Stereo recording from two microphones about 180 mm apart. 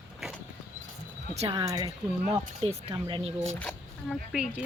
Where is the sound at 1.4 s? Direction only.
30° right (ahead or behind).